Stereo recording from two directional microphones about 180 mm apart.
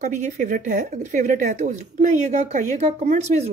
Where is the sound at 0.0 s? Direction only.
45° right (ahead or behind).